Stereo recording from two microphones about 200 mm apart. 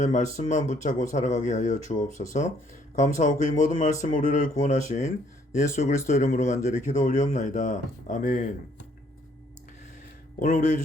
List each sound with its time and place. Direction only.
0.0 s speech: 35° left (ahead or behind)